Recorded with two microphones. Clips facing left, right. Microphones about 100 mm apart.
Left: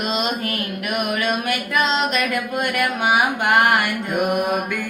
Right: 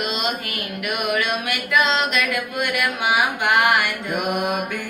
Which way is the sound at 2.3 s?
45° left (ahead or behind).